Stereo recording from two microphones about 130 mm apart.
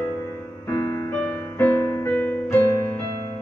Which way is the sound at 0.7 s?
25° left (ahead or behind).